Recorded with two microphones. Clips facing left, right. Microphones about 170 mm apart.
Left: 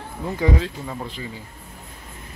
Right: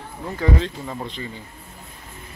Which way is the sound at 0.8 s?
Centre (ahead or behind).